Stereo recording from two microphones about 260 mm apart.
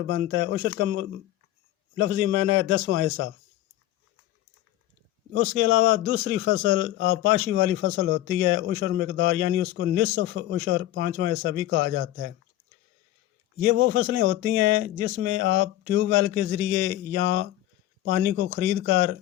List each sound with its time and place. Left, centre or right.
0.0 s a man's voice: right
5.3 s a man's voice: right
13.7 s a man's voice: right